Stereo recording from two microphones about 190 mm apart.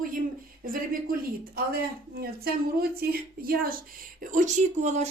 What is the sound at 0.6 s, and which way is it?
A woman's voice, 50° right (ahead or behind).